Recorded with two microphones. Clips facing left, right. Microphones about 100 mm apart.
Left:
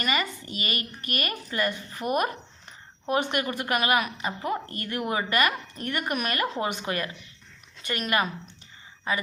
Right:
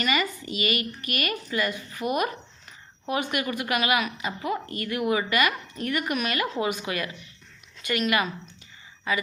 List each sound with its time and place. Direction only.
0.0 s a woman's voice: 40° left (ahead or behind)
3.3 s a woman's voice: 40° left (ahead or behind)